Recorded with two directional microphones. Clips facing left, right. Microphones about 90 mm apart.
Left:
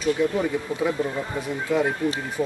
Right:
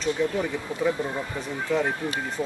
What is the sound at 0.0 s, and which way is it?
Speech, 10° left (ahead or behind).